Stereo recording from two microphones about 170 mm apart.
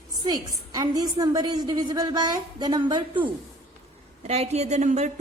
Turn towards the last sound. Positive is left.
turn(degrees=-45)  # may be behind; listen again after turning